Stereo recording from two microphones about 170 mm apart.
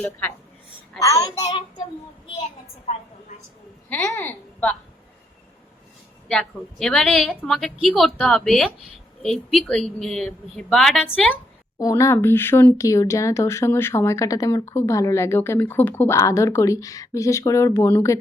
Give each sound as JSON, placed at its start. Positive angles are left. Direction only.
{"t": 0.0, "sound": "a woman's voice", "side_deg": 15}
{"t": 3.8, "sound": "a woman's voice", "side_deg": 10}
{"t": 6.2, "sound": "a woman's voice", "side_deg": 5}
{"t": 11.8, "sound": "speech", "side_deg": 20}